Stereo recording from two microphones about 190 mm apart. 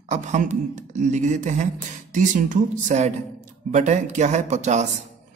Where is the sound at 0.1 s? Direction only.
40° right (ahead or behind).